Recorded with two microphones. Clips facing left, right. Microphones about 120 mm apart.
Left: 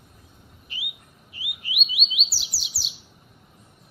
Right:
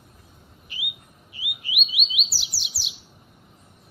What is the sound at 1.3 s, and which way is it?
Bird, centre (ahead or behind).